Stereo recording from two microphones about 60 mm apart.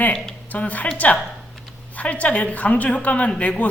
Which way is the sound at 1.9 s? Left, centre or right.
Left.